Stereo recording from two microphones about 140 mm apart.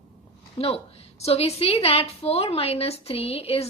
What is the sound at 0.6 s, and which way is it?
A woman's voice, 40° left (ahead or behind).